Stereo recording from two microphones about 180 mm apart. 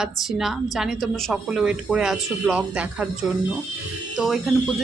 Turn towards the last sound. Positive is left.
turn(degrees=0)  # may be behind; listen again after turning